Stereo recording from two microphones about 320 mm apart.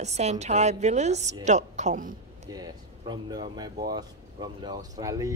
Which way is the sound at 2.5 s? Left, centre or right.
Centre.